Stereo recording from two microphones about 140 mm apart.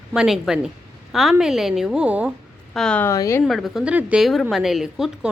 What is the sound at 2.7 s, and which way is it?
Speech, 5° left (ahead or behind).